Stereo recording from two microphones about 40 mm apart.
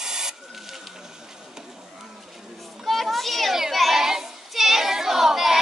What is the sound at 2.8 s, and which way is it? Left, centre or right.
Children playing, centre.